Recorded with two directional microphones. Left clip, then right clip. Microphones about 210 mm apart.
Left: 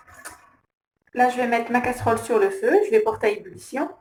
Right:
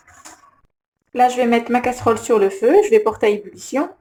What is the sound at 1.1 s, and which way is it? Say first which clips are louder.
Speech: right 5 dB; 55° right (ahead or behind).